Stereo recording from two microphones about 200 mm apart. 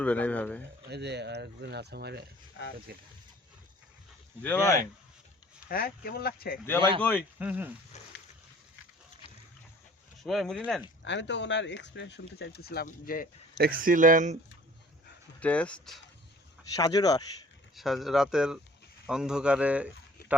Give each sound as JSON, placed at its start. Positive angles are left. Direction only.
{"t": 0.0, "sound": "speech", "side_deg": 5}
{"t": 0.9, "sound": "speech", "side_deg": -55}
{"t": 2.6, "sound": "speech", "side_deg": 65}
{"t": 4.4, "sound": "speech", "side_deg": 10}
{"t": 5.6, "sound": "speech", "side_deg": 45}
{"t": 6.7, "sound": "speech", "side_deg": 10}
{"t": 7.3, "sound": "speech", "side_deg": -10}
{"t": 10.2, "sound": "speech", "side_deg": 0}
{"t": 11.0, "sound": "speech", "side_deg": 65}
{"t": 13.6, "sound": "speech", "side_deg": -45}
{"t": 15.4, "sound": "speech", "side_deg": 5}
{"t": 16.7, "sound": "speech", "side_deg": 20}
{"t": 17.7, "sound": "speech", "side_deg": 0}